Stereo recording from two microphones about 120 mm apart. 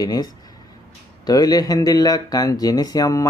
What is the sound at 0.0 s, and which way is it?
Speech, 35° left (ahead or behind).